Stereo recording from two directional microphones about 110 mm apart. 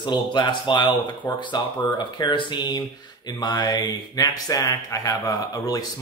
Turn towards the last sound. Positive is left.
turn(degrees=35)  # may be behind; listen again after turning